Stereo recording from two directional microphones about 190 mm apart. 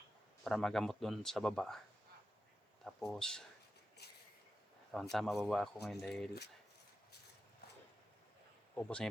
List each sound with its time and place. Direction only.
0.4 s speech: centre (ahead or behind)
2.8 s speech: centre (ahead or behind)
4.0 s a sound: 60° left (ahead or behind)
5.1 s speech: centre (ahead or behind)
8.7 s speech: 5° left (ahead or behind)